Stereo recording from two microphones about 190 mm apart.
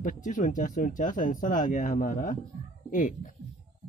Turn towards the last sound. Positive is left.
turn(degrees=45)  # may be behind; listen again after turning